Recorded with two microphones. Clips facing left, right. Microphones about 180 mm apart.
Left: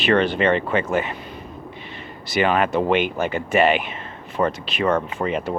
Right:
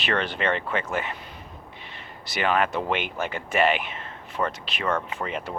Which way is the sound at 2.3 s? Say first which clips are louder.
Left 5 dB; 10° left (ahead or behind).